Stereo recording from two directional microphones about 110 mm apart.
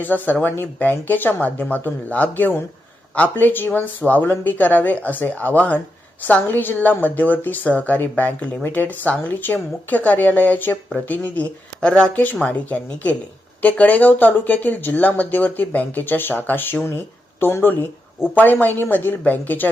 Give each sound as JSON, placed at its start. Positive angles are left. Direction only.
{"t": 0.0, "sound": "a woman's voice", "side_deg": 15}